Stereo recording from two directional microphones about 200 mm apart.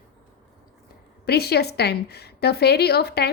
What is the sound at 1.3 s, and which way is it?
A woman's voice, 55° left (ahead or behind).